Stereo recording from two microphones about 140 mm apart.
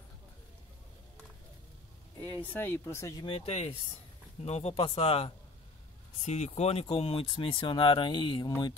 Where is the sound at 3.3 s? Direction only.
45° left (ahead or behind).